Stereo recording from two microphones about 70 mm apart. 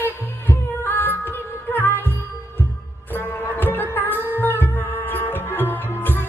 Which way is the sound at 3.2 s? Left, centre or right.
Left.